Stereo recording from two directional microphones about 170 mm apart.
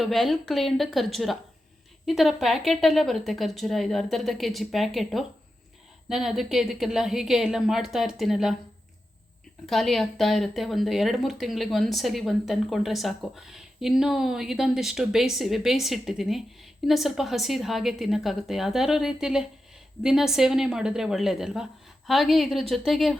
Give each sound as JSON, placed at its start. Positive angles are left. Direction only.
{"t": 0.0, "sound": "speech", "side_deg": 0}
{"t": 9.6, "sound": "speech", "side_deg": 0}